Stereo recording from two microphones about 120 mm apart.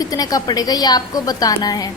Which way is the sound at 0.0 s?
30° left (ahead or behind).